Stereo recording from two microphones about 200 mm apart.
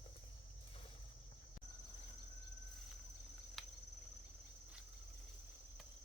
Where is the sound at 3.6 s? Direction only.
Centre (ahead or behind).